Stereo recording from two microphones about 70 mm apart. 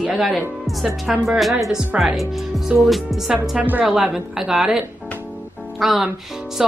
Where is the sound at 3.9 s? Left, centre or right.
Centre.